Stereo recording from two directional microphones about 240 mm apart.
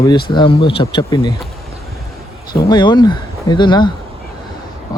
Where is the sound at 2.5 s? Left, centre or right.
Centre.